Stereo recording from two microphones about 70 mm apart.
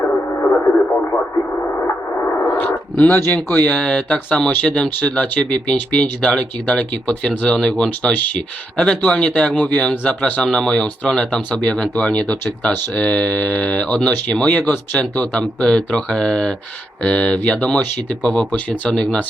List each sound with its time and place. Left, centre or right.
0.1 s radio: left
2.2 s gong: left
3.1 s speech: left
3.5 s speech: centre
7.4 s speech: centre